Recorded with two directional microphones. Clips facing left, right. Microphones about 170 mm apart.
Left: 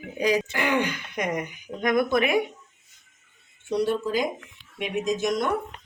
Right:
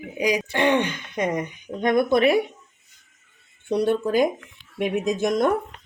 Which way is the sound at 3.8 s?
55° right (ahead or behind).